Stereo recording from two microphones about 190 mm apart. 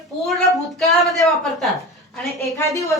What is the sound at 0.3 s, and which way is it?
A woman's voice, centre (ahead or behind).